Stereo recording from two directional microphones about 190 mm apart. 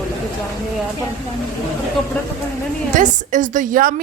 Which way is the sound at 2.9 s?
40° right (ahead or behind).